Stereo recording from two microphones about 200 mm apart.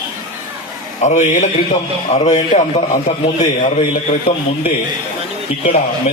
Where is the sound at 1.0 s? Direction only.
35° left (ahead or behind).